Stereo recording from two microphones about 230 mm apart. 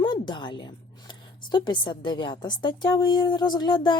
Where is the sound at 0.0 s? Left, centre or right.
Centre.